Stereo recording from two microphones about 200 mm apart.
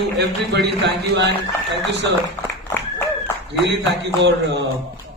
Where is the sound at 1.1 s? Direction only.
60° right (ahead or behind).